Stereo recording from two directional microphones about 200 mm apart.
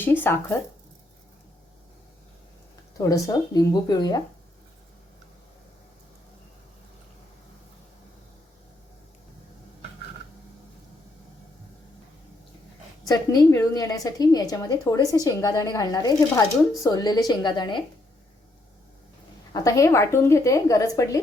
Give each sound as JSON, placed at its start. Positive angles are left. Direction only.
{"t": 0.0, "sound": "a woman's voice", "side_deg": 10}
{"t": 3.0, "sound": "speech", "side_deg": 15}
{"t": 13.1, "sound": "a woman's voice", "side_deg": 20}
{"t": 19.5, "sound": "a woman's voice", "side_deg": 15}